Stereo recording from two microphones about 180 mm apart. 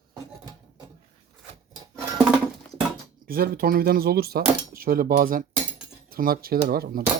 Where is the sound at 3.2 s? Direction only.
55° right (ahead or behind).